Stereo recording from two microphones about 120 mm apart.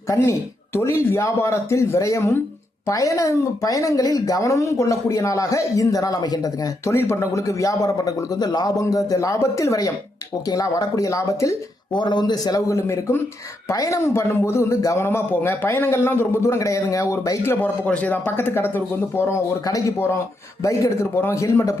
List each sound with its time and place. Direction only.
0.1 s speech: 25° left (ahead or behind)
11.9 s a man's voice: 40° left (ahead or behind)